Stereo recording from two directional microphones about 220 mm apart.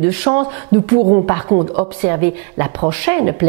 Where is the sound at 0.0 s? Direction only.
15° right (ahead or behind).